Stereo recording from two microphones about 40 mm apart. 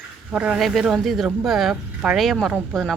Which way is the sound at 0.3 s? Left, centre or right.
Right.